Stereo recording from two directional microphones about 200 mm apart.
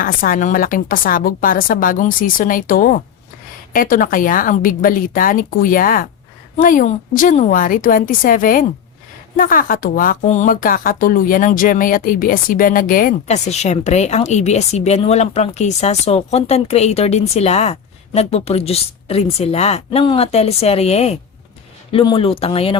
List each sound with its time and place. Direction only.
0.0 s a woman's voice: 45° left (ahead or behind); by 22.8 s 30° left (ahead or behind)